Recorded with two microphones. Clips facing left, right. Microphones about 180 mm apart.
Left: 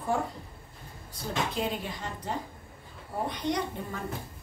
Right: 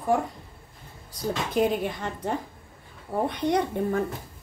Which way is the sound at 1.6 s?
55° right (ahead or behind).